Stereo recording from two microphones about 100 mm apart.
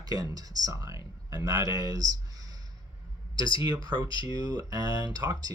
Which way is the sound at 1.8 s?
40° right (ahead or behind).